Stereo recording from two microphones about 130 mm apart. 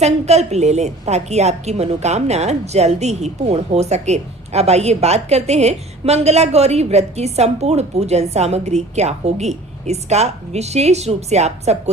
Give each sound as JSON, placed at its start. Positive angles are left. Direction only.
{"t": 0.0, "sound": "a woman's voice", "side_deg": -55}